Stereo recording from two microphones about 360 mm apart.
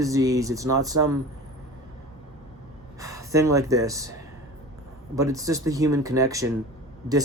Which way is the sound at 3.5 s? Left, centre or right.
Centre.